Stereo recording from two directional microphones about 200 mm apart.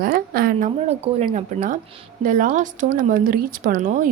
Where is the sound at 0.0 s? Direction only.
45° right (ahead or behind).